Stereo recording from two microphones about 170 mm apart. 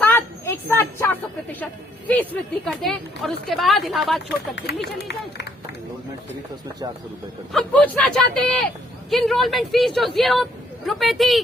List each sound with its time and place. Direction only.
0.0 s speech: 10° left (ahead or behind)
4.5 s speech: 85° left
7.5 s speech: 5° left (ahead or behind)